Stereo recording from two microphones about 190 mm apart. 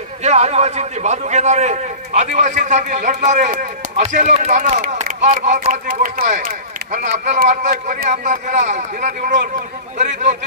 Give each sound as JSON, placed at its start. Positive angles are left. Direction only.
{"t": 0.2, "sound": "a man's voice", "side_deg": -35}